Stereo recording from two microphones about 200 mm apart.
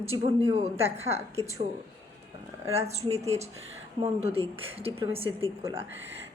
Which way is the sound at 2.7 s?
30° right (ahead or behind).